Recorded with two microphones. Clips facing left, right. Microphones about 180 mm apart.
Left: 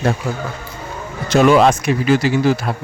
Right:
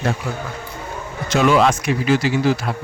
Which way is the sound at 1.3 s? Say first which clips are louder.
Left 4 dB; 45° left (ahead or behind).